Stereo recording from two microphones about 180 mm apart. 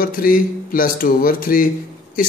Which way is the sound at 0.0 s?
50° left (ahead or behind).